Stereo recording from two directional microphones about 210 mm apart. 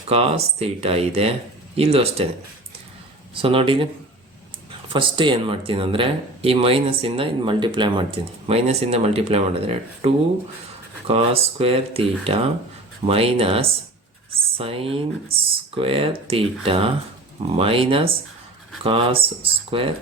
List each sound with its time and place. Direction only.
0.1 s speech: 30° right (ahead or behind)
3.3 s speech: 25° right (ahead or behind)
4.9 s speech: 25° right (ahead or behind)